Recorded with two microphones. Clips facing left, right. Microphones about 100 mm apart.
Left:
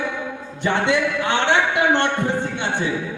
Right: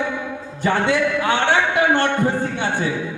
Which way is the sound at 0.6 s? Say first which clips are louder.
Right 1 dB; 20° left (ahead or behind).